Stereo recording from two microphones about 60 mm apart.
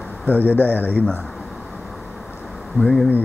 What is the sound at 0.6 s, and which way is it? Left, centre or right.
Speech, right.